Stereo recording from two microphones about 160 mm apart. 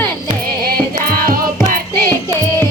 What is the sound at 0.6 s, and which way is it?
Music, 65° right (ahead or behind).